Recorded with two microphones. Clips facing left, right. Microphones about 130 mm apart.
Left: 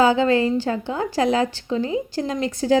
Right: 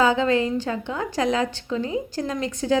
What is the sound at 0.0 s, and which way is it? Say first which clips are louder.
A woman's voice: left 3 dB; 30° left (ahead or behind).